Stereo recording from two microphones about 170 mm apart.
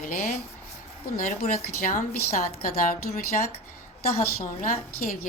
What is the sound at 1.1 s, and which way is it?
Speech, 55° left (ahead or behind).